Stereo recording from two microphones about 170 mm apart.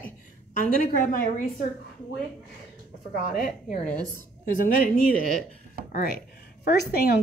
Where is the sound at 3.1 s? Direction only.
60° left (ahead or behind).